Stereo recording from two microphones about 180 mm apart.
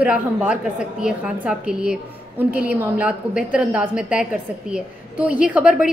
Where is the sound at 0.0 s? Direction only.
5° right (ahead or behind).